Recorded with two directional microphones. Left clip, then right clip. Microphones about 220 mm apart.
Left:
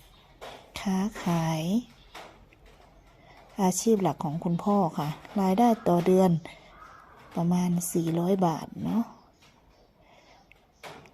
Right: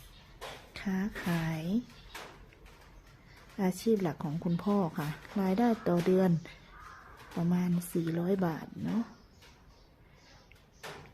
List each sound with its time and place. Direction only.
0.7 s speech: 10° left (ahead or behind)
3.6 s speech: 10° left (ahead or behind)
4.6 s speech: 5° right (ahead or behind)
5.4 s speech: 10° left (ahead or behind)